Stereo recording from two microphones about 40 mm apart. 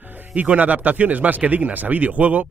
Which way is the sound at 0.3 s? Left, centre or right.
Right.